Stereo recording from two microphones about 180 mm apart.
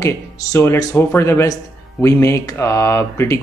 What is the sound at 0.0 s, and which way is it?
Speech, 15° left (ahead or behind).